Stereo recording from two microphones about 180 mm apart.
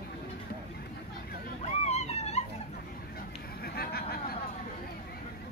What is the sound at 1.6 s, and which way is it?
Dog, 35° left (ahead or behind).